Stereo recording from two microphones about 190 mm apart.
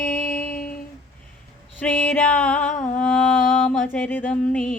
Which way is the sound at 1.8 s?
5° left (ahead or behind).